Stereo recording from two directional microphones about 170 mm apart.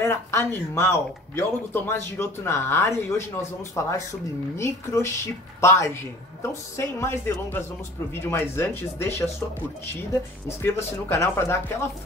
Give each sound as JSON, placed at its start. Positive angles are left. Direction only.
{"t": 0.0, "sound": "speech", "side_deg": 15}
{"t": 4.6, "sound": "speech", "side_deg": 15}
{"t": 10.6, "sound": "speech", "side_deg": 15}